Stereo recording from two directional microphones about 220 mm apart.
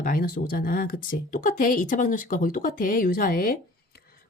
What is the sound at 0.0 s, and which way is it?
Speech, 40° left (ahead or behind).